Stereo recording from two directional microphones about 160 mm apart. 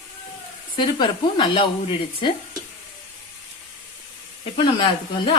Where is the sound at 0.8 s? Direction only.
30° left (ahead or behind).